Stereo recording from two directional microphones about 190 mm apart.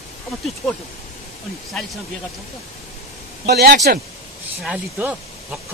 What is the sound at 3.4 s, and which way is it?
Speech, 55° right (ahead or behind).